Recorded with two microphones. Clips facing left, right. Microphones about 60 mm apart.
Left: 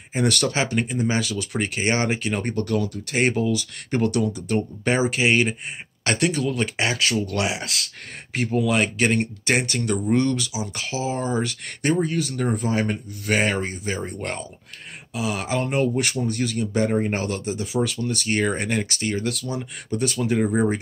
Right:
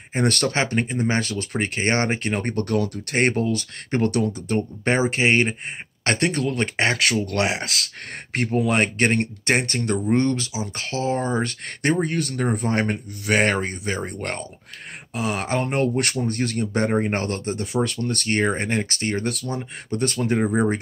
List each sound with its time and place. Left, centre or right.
0.1 s speech: right
3.9 s speech: right
9.7 s speech: right
10.9 s speech: centre
11.2 s speech: right
12.0 s speech: right
18.4 s speech: right
19.0 s speech: right
20.4 s speech: centre